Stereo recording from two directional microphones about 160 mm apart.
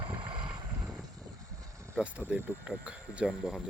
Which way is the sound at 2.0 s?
10° right (ahead or behind).